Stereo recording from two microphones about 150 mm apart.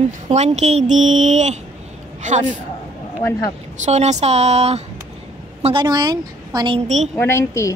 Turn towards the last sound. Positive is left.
turn(degrees=20)  # may be behind; listen again after turning